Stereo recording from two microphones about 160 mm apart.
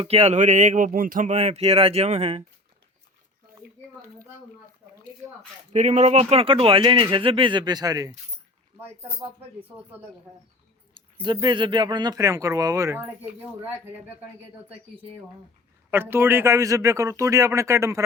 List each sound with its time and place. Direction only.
0.0 s speech: 40° right (ahead or behind)
5.7 s speech: 45° right (ahead or behind); by 8.1 s 20° right (ahead or behind)
10.9 s speech: 30° right (ahead or behind); by 13.3 s 15° right (ahead or behind)
15.9 s speech: 15° right (ahead or behind)